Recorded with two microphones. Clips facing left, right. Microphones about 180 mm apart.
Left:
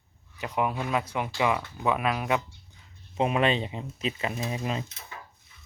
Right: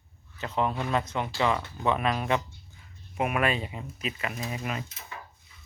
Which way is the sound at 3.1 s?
25° left (ahead or behind).